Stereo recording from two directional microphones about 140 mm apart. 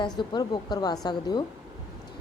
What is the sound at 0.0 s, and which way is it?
A woman's voice, 35° left (ahead or behind).